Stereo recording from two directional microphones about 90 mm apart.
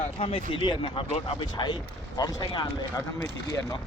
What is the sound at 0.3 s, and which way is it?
Speech, 85° left.